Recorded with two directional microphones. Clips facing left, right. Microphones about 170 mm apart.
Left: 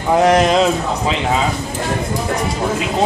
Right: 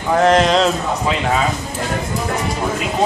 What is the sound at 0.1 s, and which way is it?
Speech, 10° left (ahead or behind).